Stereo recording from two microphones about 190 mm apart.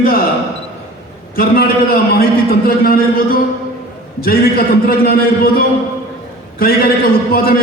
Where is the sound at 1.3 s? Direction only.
50° left (ahead or behind).